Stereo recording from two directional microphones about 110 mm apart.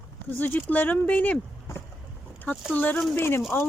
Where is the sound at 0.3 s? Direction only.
15° left (ahead or behind).